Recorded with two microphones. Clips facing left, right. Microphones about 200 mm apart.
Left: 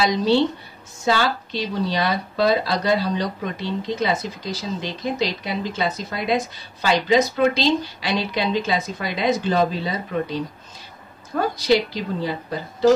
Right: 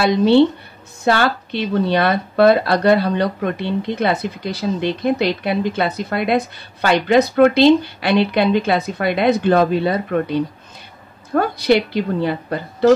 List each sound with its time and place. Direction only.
0.0 s speech: 60° right (ahead or behind)